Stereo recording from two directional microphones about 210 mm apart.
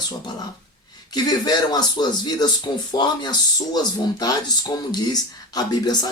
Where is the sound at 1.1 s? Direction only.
20° left (ahead or behind).